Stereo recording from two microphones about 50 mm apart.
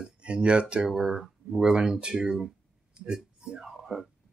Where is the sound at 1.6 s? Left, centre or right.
Centre.